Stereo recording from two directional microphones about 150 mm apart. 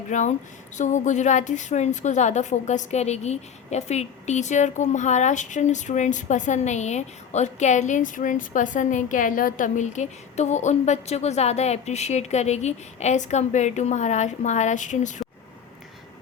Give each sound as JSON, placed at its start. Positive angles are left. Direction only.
{"t": 0.1, "sound": "a woman's voice", "side_deg": 55}